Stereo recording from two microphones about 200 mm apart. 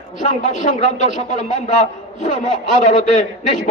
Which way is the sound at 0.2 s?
35° left (ahead or behind).